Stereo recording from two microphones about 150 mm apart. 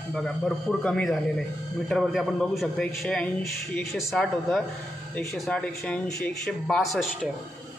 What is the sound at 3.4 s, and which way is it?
Speech, 20° left (ahead or behind).